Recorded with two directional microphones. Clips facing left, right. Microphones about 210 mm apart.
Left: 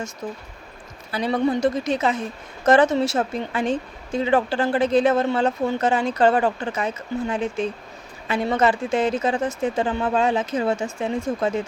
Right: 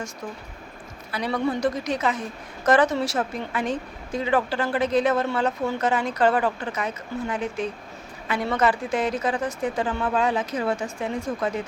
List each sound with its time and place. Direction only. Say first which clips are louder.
1.1 s a woman's voice: left 4 dB; 25° left (ahead or behind)